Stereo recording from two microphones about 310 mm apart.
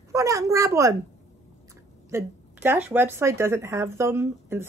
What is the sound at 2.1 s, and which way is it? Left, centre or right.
Speech, centre.